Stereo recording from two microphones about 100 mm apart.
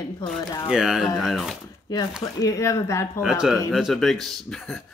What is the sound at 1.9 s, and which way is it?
Speech, 40° left (ahead or behind).